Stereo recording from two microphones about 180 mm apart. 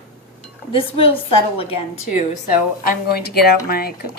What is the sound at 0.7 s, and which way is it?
A woman's voice, 30° left (ahead or behind).